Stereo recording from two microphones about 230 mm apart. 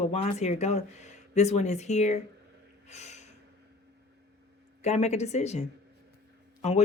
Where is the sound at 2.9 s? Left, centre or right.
Left.